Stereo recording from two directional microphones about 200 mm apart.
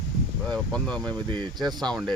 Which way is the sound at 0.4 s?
5° left (ahead or behind).